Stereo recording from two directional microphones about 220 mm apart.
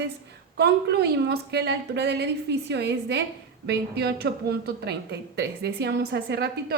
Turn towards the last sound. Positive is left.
turn(degrees=-45)  # may be behind; listen again after turning